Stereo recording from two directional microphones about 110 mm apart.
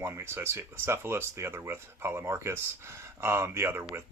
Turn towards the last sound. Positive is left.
turn(degrees=-20)  # may be behind; listen again after turning